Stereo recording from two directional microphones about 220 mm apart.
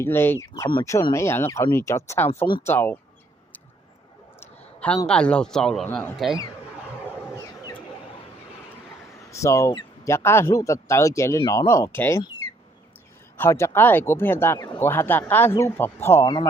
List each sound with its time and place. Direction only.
0.0 s speech: 10° left (ahead or behind)
4.4 s clicking: 5° left (ahead or behind)
5.0 s speech: 5° left (ahead or behind)
9.3 s speech: 15° left (ahead or behind)